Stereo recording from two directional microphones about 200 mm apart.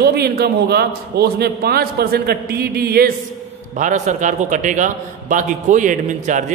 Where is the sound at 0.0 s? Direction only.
55° right (ahead or behind).